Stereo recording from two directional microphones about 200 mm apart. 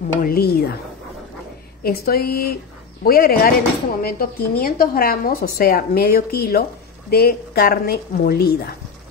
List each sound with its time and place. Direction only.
0.1 s a woman's voice: 45° left (ahead or behind)
1.8 s a woman's voice: 50° left (ahead or behind)